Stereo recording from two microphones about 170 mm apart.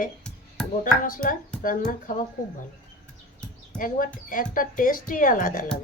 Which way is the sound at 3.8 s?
55° left (ahead or behind).